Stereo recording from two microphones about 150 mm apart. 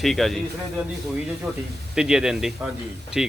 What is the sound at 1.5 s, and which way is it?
Speech, centre (ahead or behind).